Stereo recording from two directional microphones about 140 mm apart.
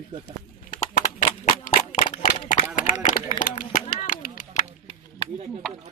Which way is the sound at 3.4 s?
70° left (ahead or behind).